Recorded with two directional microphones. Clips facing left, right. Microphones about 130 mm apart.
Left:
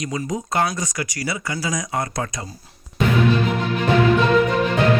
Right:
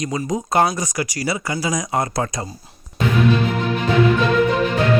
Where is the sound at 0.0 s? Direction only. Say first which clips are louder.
Right 3 dB; 30° right (ahead or behind).